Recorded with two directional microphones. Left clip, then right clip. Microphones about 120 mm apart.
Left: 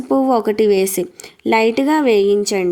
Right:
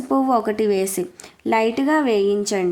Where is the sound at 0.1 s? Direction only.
30° left (ahead or behind).